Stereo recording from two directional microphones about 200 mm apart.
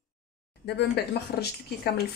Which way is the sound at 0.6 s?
55° left (ahead or behind).